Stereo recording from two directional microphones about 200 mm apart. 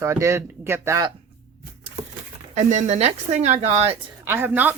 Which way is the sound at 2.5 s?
35° right (ahead or behind).